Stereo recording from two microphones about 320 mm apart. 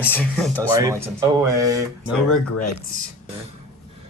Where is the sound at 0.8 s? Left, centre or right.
Centre.